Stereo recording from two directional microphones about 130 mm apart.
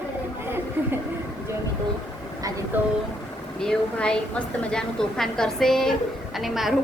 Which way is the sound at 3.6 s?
5° left (ahead or behind).